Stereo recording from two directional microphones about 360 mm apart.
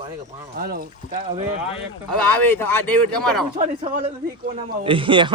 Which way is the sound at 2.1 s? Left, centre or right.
Centre.